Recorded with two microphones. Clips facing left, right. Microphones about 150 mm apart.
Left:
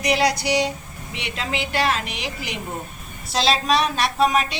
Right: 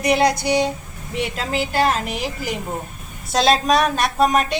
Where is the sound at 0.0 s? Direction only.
55° right (ahead or behind).